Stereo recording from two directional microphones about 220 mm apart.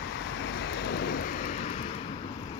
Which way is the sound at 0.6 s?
50° left (ahead or behind).